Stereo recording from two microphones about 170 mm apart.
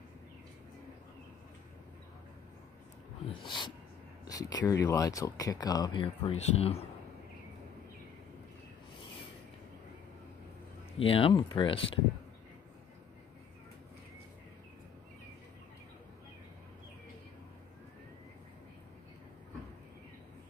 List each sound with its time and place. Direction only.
3.3 s speech: 25° left (ahead or behind)
6.3 s speech: 35° left (ahead or behind)
11.0 s speech: 30° left (ahead or behind)